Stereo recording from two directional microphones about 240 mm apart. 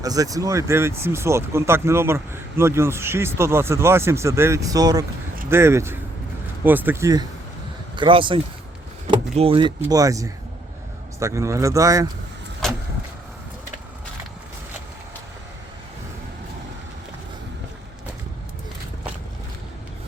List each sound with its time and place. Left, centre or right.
0.0 s speech: centre